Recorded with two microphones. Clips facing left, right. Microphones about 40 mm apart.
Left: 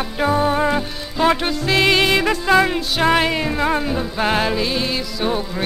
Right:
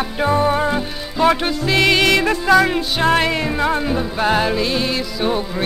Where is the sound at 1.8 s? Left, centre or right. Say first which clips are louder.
Right 1 dB; left.